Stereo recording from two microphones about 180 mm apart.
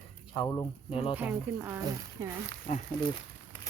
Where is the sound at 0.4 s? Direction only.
20° left (ahead or behind).